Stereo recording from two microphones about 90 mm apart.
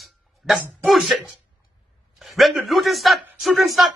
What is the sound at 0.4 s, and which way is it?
A man's voice, 10° right (ahead or behind).